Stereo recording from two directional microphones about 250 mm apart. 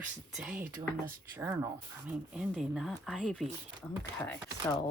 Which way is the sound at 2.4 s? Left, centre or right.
Centre.